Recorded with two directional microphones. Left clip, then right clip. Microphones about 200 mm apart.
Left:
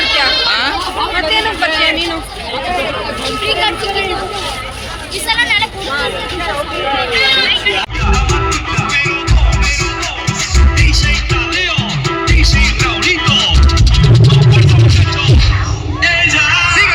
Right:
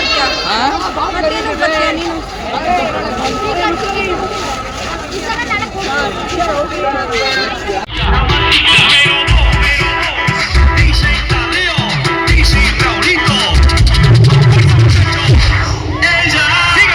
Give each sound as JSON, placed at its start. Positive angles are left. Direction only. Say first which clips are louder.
{"t": 1.3, "sound": "a sound", "louder": "left 1 dB", "side_deg": 5}
{"t": 8.1, "sound": "music", "louder": "right 6 dB", "side_deg": 35}
{"t": 10.8, "sound": "music", "louder": "left 2 dB", "side_deg": 20}
{"t": 16.0, "sound": "music", "louder": "even", "side_deg": 15}